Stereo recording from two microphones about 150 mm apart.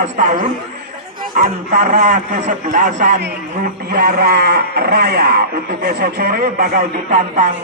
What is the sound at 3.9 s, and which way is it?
A man's voice, 75° right (ahead or behind).